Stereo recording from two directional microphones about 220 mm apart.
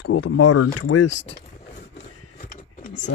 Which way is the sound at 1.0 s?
55° left (ahead or behind).